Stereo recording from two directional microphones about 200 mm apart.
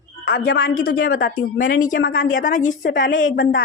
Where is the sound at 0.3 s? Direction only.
45° left (ahead or behind).